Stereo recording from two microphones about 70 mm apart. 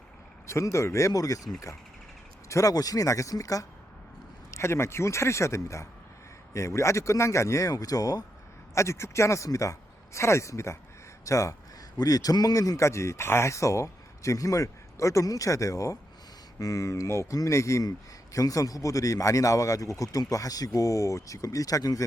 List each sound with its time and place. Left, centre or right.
0.4 s a man's voice: left
2.5 s speech: left
4.5 s a man's voice: left
8.7 s a man's voice: left
11.9 s a man's voice: left